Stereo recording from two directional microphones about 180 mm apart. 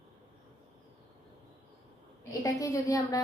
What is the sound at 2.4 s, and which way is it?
Speech, 20° left (ahead or behind).